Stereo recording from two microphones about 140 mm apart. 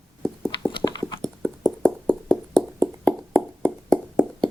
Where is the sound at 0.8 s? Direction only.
30° left (ahead or behind).